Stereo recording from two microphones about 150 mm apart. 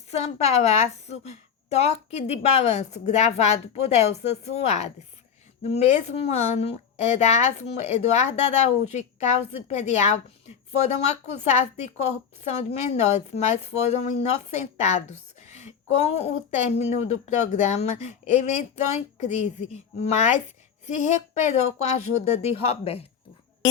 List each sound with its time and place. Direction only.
0.1 s a woman's voice: 45° left (ahead or behind)
21.4 s a woman's voice: 50° left (ahead or behind)